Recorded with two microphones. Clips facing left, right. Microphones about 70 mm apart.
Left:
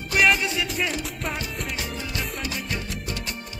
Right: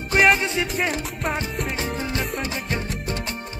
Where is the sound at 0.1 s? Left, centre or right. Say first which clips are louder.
Right 3 dB; right.